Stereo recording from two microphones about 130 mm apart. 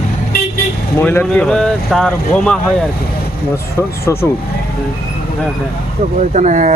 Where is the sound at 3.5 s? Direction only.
20° left (ahead or behind).